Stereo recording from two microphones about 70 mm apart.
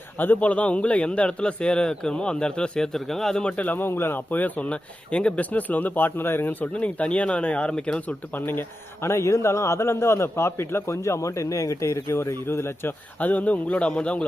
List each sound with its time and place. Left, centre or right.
0.2 s a man's voice: left
3.7 s speech: left; by 8.0 s centre
9.0 s a man's voice: left
13.1 s speech: left